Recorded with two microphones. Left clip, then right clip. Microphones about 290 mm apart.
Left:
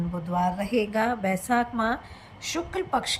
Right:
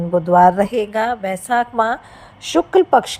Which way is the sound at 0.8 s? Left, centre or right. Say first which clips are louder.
Right 7 dB; centre.